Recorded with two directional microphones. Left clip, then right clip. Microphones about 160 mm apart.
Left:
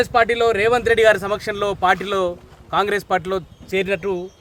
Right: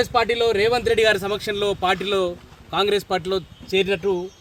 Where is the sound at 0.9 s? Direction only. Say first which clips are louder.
Left 4 dB; centre (ahead or behind).